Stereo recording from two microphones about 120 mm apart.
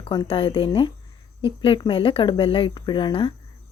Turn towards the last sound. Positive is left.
turn(degrees=45)  # may be behind; listen again after turning